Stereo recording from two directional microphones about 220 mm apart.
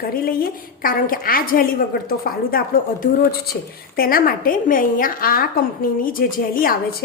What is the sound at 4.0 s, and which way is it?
A woman's voice, 40° left (ahead or behind).